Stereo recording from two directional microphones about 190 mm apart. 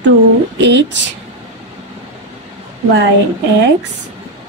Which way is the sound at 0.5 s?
70° right (ahead or behind).